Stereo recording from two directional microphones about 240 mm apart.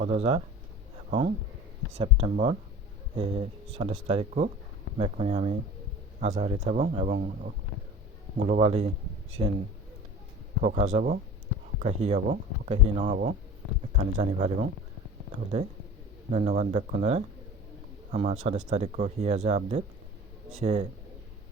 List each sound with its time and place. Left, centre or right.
0.0 s speech: right
2.0 s speech: right
10.6 s speech: right